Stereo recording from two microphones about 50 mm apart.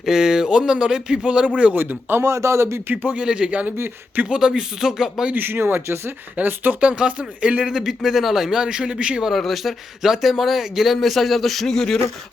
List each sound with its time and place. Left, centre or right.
0.0 s speech: centre
1.7 s speech: right
2.2 s a man's voice: right
2.9 s speech: right
3.2 s speech: centre
5.3 s speech: right
6.3 s speech: right
6.7 s speech: right
7.6 s speech: centre
9.2 s speech: centre